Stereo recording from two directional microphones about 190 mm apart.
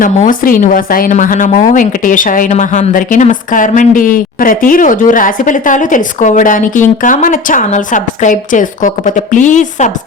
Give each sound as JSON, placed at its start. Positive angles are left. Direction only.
{"t": 0.0, "sound": "speech", "side_deg": 45}